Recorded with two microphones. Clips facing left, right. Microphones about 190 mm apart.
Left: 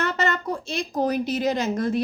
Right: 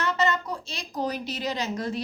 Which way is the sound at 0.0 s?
55° left (ahead or behind).